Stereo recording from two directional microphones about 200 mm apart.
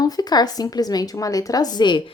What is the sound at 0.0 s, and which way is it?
A woman's voice, 20° left (ahead or behind).